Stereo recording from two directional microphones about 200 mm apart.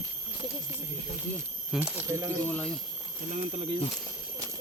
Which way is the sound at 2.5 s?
5° left (ahead or behind).